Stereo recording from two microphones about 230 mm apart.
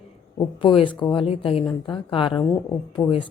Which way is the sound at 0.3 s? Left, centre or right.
Left.